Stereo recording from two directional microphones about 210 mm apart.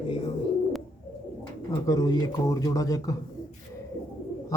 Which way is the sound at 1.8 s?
20° left (ahead or behind).